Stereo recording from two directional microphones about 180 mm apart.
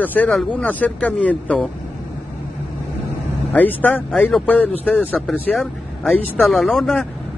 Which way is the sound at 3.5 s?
10° left (ahead or behind).